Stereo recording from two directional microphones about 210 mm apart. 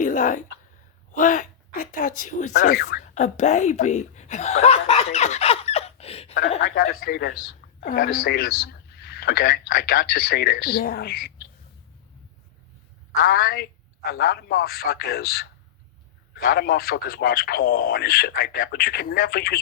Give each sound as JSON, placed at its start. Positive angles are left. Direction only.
{"t": 0.0, "sound": "a woman's voice", "side_deg": 35}
{"t": 6.6, "sound": "a man's voice", "side_deg": 50}
{"t": 13.1, "sound": "a man's voice", "side_deg": 45}
{"t": 18.8, "sound": "a man's voice", "side_deg": 50}